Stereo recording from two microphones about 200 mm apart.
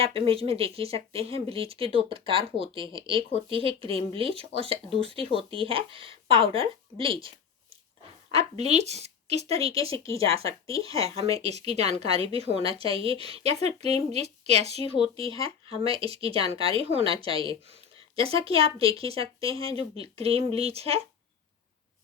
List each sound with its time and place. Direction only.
0.0 s speech: 30° right (ahead or behind)
8.4 s a woman's voice: 30° right (ahead or behind)